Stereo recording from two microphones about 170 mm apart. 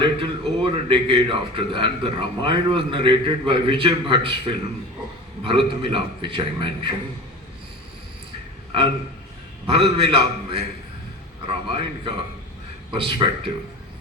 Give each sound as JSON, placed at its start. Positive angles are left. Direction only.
{"t": 0.0, "sound": "a man's voice", "side_deg": -30}
{"t": 9.6, "sound": "a man's voice", "side_deg": -30}